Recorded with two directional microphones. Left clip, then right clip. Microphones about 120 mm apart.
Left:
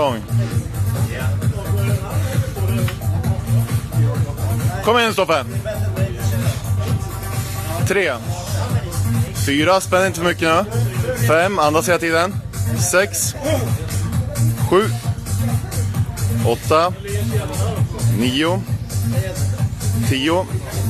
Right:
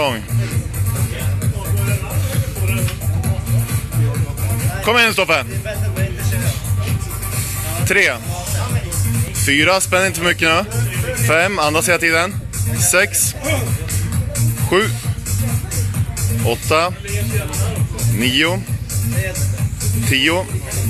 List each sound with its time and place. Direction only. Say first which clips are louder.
4.8 s speech: right 2 dB; 10° left (ahead or behind)
7.8 s speech: right 4 dB; 10° left (ahead or behind)
9.4 s speech: right 2 dB; 15° left (ahead or behind)
14.7 s speech: even; 15° left (ahead or behind)
16.4 s speech: left 1 dB; 15° left (ahead or behind)
18.2 s speech: right 3 dB; 15° left (ahead or behind)
20.1 s speech: right 3 dB; 15° left (ahead or behind)